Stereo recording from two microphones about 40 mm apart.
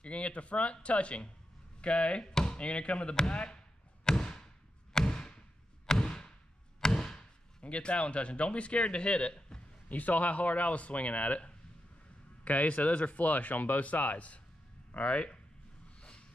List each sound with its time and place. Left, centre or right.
0.0 s speech: left
2.3 s chop: centre
2.6 s speech: left
4.0 s a sound: centre
7.6 s speech: left
9.8 s speech: left
16.0 s a sound: left